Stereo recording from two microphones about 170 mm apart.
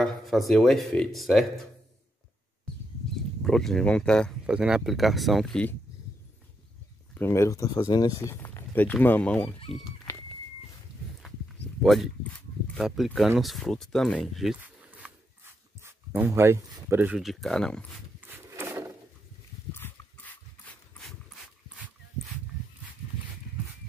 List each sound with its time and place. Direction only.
0.0 s speech: centre (ahead or behind)
3.4 s speech: 5° left (ahead or behind)
7.2 s speech: 15° left (ahead or behind)
11.8 s speech: centre (ahead or behind)
13.4 s a sound: centre (ahead or behind)
17.2 s speech: centre (ahead or behind)
18.2 s wood: 15° right (ahead or behind)
19.7 s dog: 10° left (ahead or behind)